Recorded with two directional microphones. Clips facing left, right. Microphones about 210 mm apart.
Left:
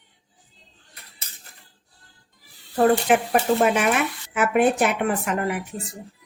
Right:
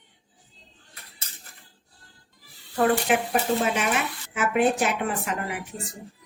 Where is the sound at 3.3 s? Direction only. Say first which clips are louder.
Left 5 dB; 55° left (ahead or behind).